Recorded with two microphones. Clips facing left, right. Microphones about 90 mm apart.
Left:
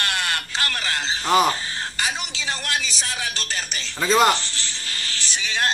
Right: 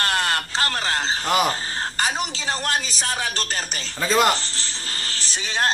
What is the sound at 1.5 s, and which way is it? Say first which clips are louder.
A woman's voice: right 1 dB; 40° right (ahead or behind).